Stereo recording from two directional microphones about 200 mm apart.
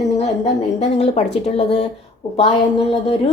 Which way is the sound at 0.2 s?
30° left (ahead or behind).